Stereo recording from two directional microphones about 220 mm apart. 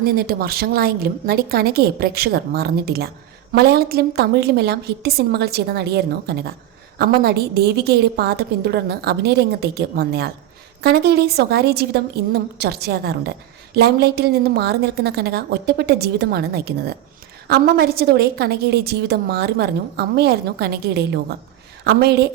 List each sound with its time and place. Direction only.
0.0 s a woman's voice: 45° right (ahead or behind)